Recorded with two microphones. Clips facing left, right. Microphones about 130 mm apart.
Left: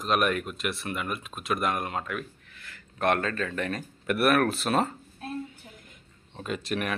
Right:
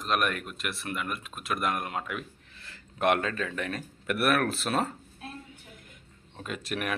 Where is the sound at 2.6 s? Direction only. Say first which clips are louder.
Left 1 dB; 30° right (ahead or behind).